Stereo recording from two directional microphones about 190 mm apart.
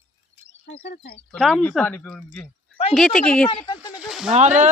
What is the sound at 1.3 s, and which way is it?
Speech, 5° left (ahead or behind).